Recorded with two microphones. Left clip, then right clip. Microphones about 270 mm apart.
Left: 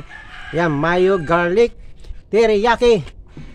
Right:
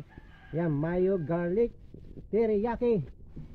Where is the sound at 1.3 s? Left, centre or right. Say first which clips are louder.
Left 14 dB; centre.